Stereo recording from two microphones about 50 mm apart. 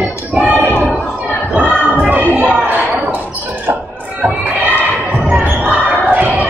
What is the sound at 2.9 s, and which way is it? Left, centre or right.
Basketball bounce, right.